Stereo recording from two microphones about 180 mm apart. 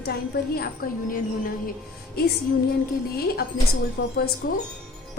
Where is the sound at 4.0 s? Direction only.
65° left (ahead or behind).